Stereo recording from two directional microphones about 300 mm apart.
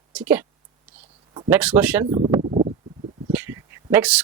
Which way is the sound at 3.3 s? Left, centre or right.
Centre.